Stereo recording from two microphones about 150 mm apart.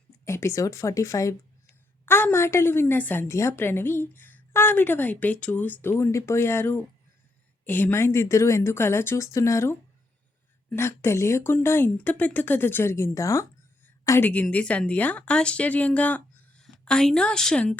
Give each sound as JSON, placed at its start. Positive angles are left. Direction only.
{"t": 0.3, "sound": "speech", "side_deg": 20}